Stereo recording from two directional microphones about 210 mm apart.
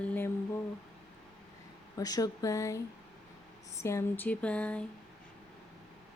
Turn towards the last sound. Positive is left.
turn(degrees=5)  # may be behind; listen again after turning